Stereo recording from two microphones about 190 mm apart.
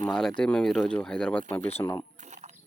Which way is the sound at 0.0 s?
5° left (ahead or behind).